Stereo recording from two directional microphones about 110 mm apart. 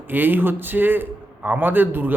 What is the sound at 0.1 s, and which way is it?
A man's voice, 15° right (ahead or behind).